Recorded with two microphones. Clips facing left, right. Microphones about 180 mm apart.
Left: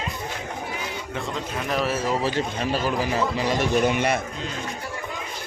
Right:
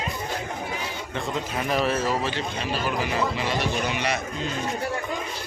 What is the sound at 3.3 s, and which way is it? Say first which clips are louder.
Speech: left 4 dB; 45° left (ahead or behind).